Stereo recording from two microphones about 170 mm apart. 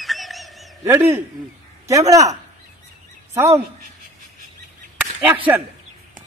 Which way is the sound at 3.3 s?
15° right (ahead or behind).